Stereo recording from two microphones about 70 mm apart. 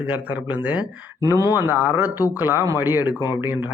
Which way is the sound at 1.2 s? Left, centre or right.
Right.